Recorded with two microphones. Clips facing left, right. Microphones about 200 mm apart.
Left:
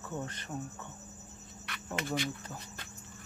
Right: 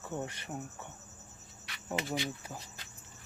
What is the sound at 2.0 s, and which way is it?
Speech, 50° left (ahead or behind).